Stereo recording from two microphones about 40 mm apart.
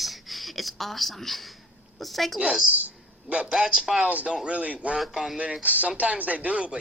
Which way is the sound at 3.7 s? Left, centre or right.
Centre.